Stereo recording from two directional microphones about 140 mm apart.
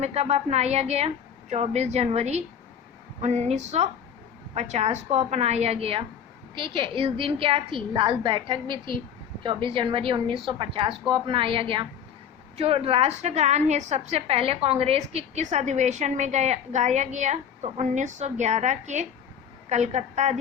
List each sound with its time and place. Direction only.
0.0 s a woman's voice: 50° right (ahead or behind)